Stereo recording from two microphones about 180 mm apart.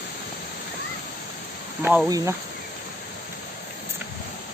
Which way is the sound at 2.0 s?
20° right (ahead or behind).